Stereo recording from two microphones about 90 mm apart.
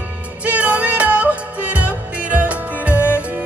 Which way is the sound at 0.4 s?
15° right (ahead or behind).